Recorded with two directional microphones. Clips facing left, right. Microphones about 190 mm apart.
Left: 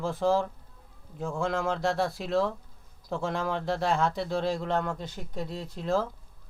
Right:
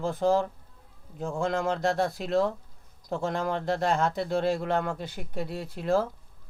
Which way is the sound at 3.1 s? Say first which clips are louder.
Right 1 dB; 40° right (ahead or behind).